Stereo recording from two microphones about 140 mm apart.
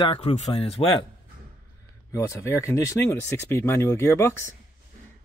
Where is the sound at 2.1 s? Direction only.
20° left (ahead or behind).